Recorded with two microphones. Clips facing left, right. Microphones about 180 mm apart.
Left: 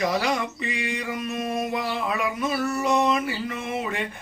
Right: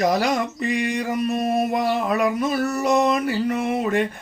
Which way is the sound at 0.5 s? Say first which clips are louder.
Right 7 dB; 45° right (ahead or behind).